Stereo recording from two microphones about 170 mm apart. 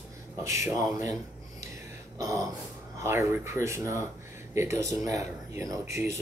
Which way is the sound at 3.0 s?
15° right (ahead or behind).